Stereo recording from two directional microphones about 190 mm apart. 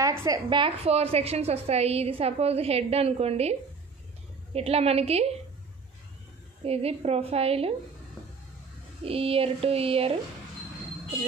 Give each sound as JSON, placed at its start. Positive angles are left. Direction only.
{"t": 0.0, "sound": "a woman's voice", "side_deg": -15}
{"t": 4.6, "sound": "a woman's voice", "side_deg": -30}
{"t": 6.6, "sound": "a woman's voice", "side_deg": -30}
{"t": 9.0, "sound": "a woman's voice", "side_deg": -30}